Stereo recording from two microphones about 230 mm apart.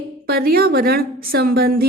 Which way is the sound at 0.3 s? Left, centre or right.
Right.